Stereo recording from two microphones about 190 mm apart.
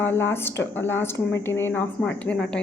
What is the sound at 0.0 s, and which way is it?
A woman's voice, 10° left (ahead or behind).